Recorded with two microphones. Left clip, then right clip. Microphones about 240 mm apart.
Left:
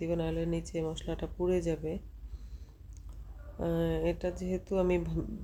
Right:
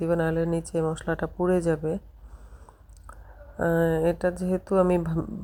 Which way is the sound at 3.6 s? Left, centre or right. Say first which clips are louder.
Right 9 dB; right.